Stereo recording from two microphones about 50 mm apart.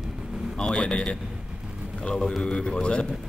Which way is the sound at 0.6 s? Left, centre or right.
Centre.